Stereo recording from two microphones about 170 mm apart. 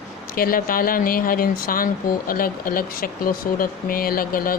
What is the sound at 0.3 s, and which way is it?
Speech, 60° left (ahead or behind).